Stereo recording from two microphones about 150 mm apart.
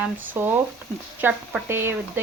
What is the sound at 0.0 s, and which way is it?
Speech, 15° right (ahead or behind).